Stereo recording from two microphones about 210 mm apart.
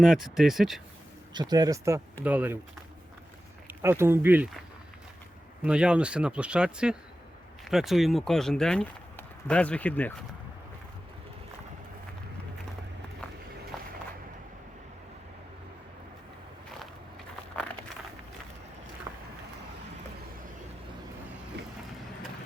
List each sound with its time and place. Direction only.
0.0 s speech: centre (ahead or behind)
1.3 s speech: 20° right (ahead or behind)
3.7 s speech: 10° right (ahead or behind)
5.6 s speech: 5° right (ahead or behind)
19.1 s vehicle: 15° right (ahead or behind)